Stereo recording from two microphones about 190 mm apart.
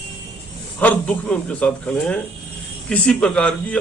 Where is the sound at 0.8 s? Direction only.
10° left (ahead or behind).